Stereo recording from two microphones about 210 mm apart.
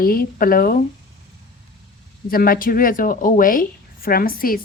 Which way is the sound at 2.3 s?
45° left (ahead or behind).